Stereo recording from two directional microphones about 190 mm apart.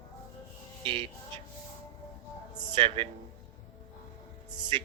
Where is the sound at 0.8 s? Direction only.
30° right (ahead or behind).